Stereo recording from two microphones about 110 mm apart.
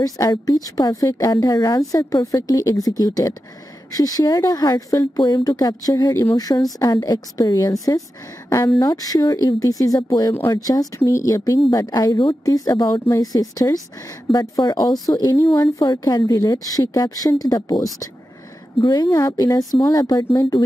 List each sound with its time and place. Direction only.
0.0 s a woman's voice: 35° left (ahead or behind)
12.4 s a woman's voice: 30° left (ahead or behind)
13.0 s a woman's voice: 30° left (ahead or behind)
15.3 s speech: 25° left (ahead or behind)
15.8 s a woman's voice: 40° left (ahead or behind)